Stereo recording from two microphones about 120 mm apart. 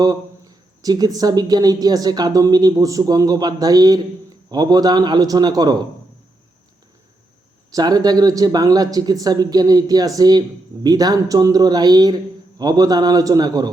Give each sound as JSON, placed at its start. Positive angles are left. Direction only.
{"t": 0.0, "sound": "speech", "side_deg": -30}
{"t": 7.7, "sound": "speech", "side_deg": -35}